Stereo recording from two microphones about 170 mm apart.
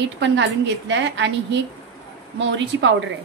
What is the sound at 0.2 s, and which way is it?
A woman's voice, 90° right.